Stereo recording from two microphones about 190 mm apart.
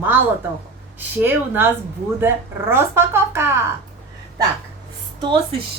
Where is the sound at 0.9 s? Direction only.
10° right (ahead or behind).